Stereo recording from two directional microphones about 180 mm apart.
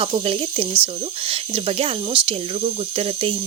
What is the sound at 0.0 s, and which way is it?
Speech, 30° right (ahead or behind).